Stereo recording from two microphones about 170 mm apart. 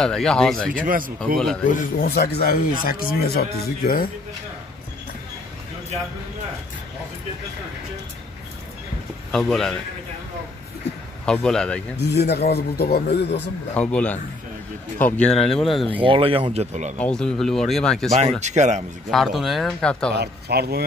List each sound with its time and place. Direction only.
0.0 s speech: 5° left (ahead or behind)
0.8 s speech: 55° right (ahead or behind)
1.7 s speech: 55° left (ahead or behind)
9.3 s speech: 5° left (ahead or behind)
11.2 s speech: 5° left (ahead or behind)
12.1 s speech: 75° left (ahead or behind)
13.7 s speech: 10° left (ahead or behind)
16.0 s speech: 30° right (ahead or behind)
17.0 s speech: 5° left (ahead or behind)
18.4 s speech: 45° right (ahead or behind)
19.0 s speech: centre (ahead or behind)
20.2 s speech: 70° right (ahead or behind)